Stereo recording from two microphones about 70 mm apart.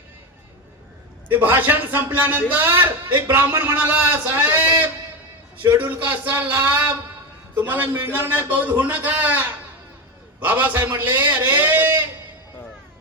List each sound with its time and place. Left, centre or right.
1.3 s a man's voice: right
10.4 s a man's voice: right